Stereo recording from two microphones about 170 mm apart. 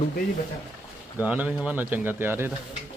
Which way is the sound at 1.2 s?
10° right (ahead or behind).